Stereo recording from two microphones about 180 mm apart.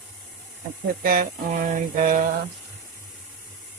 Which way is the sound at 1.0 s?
50° right (ahead or behind).